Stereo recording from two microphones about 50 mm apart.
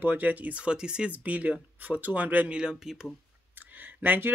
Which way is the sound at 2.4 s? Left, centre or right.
Centre.